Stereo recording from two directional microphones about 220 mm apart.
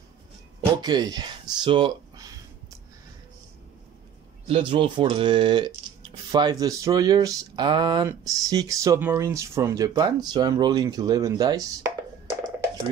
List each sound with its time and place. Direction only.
0.7 s speech: 20° right (ahead or behind)
4.5 s speech: 25° right (ahead or behind)